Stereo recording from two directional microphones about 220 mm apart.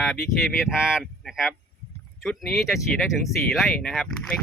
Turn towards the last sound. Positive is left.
turn(degrees=5)  # may be behind; listen again after turning